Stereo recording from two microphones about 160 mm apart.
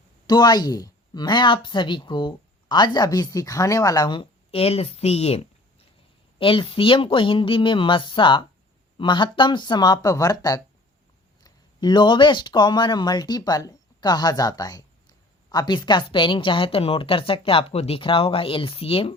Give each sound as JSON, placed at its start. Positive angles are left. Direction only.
{"t": 0.3, "sound": "a woman's voice", "side_deg": 25}